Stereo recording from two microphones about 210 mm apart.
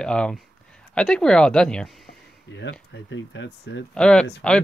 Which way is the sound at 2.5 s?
60° left (ahead or behind).